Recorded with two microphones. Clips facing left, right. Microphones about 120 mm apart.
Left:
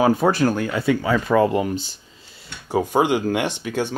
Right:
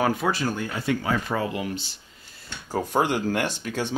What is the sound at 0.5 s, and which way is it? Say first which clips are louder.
Speech: left 7 dB; 90° left.